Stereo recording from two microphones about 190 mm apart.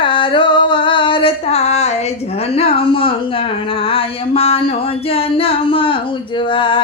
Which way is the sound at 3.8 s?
30° left (ahead or behind).